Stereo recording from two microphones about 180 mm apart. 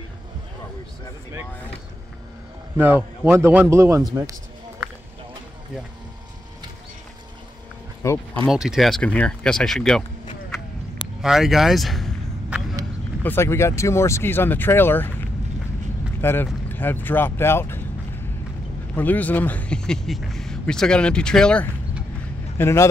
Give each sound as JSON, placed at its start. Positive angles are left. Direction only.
{"t": 2.8, "sound": "a man's voice", "side_deg": -10}
{"t": 8.0, "sound": "speech", "side_deg": 15}
{"t": 8.5, "sound": "speech", "side_deg": 0}
{"t": 11.1, "sound": "vehicle", "side_deg": 0}
{"t": 13.2, "sound": "speech", "side_deg": 10}
{"t": 18.9, "sound": "speech", "side_deg": 10}